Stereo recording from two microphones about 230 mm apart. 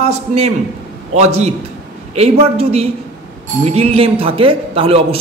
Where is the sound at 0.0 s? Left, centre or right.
Right.